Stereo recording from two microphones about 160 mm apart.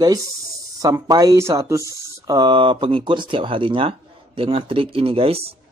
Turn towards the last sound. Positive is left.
turn(degrees=-35)  # may be behind; listen again after turning